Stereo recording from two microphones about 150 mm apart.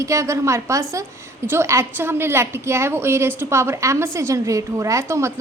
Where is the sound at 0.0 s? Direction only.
20° right (ahead or behind).